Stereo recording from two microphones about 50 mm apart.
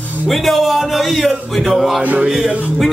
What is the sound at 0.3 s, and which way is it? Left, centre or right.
A man's voice, centre.